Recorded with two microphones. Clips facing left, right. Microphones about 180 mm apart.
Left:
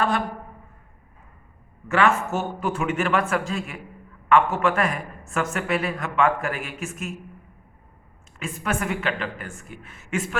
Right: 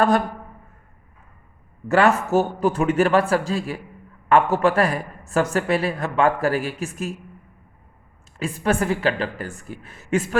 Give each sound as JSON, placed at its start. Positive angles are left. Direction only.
{"t": 1.9, "sound": "a man's voice", "side_deg": -35}
{"t": 8.4, "sound": "a man's voice", "side_deg": -35}